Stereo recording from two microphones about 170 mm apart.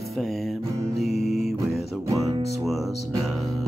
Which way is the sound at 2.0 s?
20° right (ahead or behind).